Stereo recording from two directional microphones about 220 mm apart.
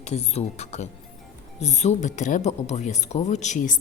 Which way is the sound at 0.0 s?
30° left (ahead or behind).